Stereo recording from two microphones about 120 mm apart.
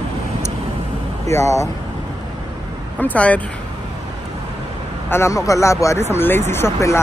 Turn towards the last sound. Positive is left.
turn(degrees=25)  # may be behind; listen again after turning